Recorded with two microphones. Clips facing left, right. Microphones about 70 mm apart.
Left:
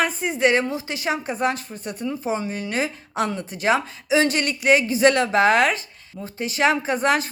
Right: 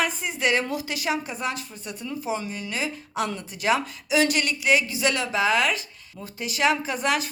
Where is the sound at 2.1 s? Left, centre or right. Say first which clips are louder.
Left 3 dB; left.